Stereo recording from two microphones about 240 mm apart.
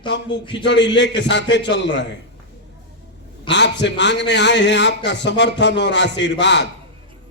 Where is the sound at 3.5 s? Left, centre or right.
Left.